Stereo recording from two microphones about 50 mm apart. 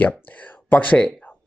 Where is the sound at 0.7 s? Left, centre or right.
Left.